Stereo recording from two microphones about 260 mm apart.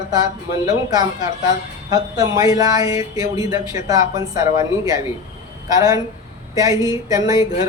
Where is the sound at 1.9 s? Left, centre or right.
Centre.